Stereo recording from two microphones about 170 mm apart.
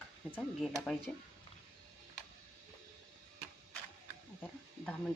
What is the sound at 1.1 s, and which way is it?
Speech, 5° left (ahead or behind).